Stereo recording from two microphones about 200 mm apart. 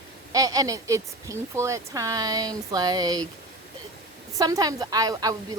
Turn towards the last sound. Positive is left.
turn(degrees=-20)  # may be behind; listen again after turning